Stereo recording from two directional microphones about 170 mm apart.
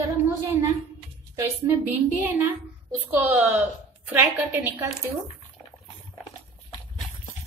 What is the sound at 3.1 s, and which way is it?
A woman's voice, 10° right (ahead or behind).